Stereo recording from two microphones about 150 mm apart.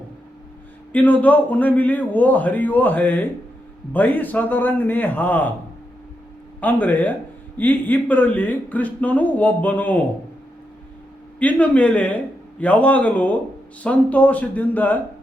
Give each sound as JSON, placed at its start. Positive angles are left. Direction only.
{"t": 0.9, "sound": "a man's voice", "side_deg": 10}
{"t": 6.6, "sound": "a man's voice", "side_deg": 10}
{"t": 11.3, "sound": "a man's voice", "side_deg": 10}